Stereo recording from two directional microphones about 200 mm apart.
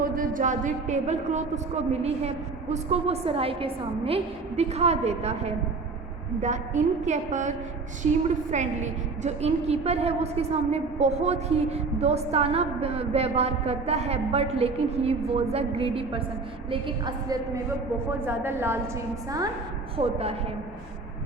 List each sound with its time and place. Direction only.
0.0 s a woman's voice: 45° right (ahead or behind)
8.5 s a woman's voice: 35° right (ahead or behind); by 18.8 s 10° right (ahead or behind)
20.0 s a woman's voice: 30° right (ahead or behind)